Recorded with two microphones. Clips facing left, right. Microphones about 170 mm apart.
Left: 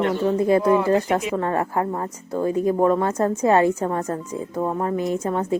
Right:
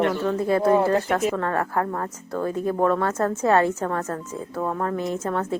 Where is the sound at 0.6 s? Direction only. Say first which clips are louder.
Even; 40° right (ahead or behind).